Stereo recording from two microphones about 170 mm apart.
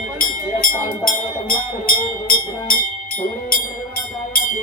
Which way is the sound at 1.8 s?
55° left (ahead or behind).